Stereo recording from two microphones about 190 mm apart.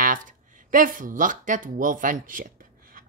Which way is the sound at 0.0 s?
45° right (ahead or behind).